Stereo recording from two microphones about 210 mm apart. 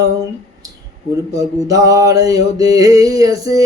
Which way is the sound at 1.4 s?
15° right (ahead or behind).